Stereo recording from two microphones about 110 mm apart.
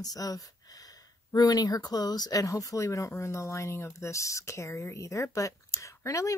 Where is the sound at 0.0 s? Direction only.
35° left (ahead or behind).